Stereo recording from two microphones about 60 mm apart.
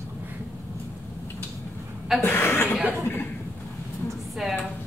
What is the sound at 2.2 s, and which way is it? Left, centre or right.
Chuckle, left.